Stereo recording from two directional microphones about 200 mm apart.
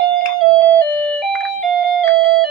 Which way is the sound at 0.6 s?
5° left (ahead or behind).